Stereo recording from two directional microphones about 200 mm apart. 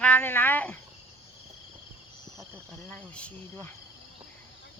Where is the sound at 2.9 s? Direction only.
5° left (ahead or behind).